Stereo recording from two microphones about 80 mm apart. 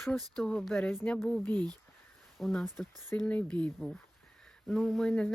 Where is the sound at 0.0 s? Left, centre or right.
Centre.